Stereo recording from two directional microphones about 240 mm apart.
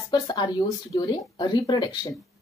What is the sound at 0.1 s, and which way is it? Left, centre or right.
Speech, centre.